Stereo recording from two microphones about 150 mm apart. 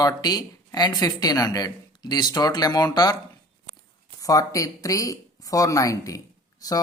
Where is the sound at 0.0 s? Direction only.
25° left (ahead or behind).